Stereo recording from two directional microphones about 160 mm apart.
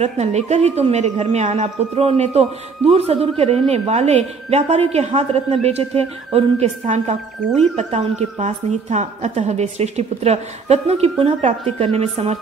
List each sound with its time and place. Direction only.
0.0 s speech: 45° right (ahead or behind)